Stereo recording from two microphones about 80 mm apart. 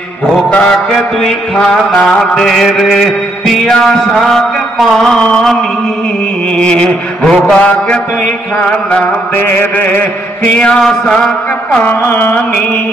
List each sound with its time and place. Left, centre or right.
0.5 s chant: centre
3.4 s mantra: centre
6.5 s chant: centre
11.8 s mantra: left